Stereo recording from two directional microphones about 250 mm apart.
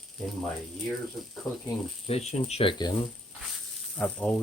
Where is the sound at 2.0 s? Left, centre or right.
Left.